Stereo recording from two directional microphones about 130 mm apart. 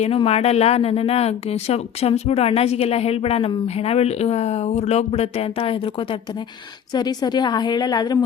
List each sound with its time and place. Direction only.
0.0 s speech: 50° left (ahead or behind)
6.9 s a woman's voice: 30° left (ahead or behind)